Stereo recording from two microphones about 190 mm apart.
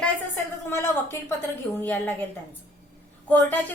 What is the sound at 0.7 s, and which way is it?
A woman's voice, 15° left (ahead or behind).